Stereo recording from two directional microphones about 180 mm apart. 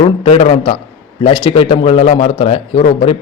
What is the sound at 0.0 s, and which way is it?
A man's voice, 30° left (ahead or behind).